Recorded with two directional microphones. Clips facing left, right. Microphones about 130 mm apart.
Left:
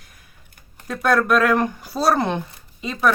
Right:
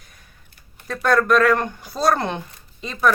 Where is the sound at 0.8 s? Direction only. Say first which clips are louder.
Even; 5° left (ahead or behind).